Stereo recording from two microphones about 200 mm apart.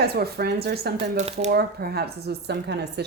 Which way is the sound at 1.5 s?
50° right (ahead or behind).